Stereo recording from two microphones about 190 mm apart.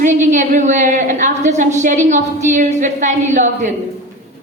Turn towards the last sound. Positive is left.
turn(degrees=-40)  # may be behind; listen again after turning